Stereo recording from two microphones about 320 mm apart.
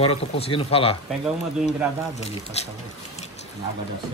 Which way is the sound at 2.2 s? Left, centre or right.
Centre.